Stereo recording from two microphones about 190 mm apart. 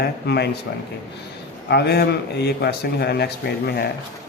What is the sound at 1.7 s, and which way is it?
Speech, 60° left (ahead or behind).